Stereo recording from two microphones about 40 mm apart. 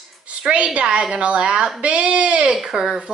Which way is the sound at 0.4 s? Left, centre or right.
Right.